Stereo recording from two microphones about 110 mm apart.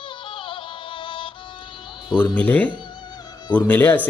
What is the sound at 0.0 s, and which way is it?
Music, 50° left (ahead or behind).